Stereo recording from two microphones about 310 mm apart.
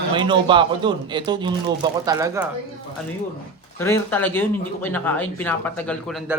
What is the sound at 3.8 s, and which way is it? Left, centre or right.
Speech, centre.